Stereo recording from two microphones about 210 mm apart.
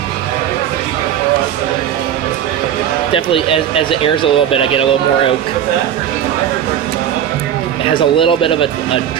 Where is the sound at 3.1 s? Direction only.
25° left (ahead or behind).